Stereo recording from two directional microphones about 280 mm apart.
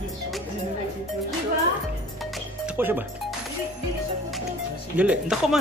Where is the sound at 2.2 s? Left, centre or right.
Centre.